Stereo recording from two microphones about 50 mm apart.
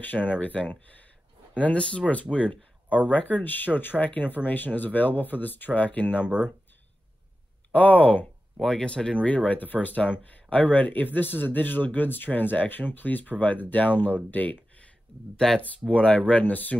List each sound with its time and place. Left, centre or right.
0.0 s speech: left
1.6 s speech: left
2.3 s speech: left
6.2 s speech: right
7.7 s speech: left
8.5 s speech: centre
9.3 s speech: left
15.9 s speech: left